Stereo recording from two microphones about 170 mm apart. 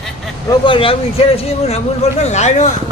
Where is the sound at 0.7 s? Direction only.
30° left (ahead or behind).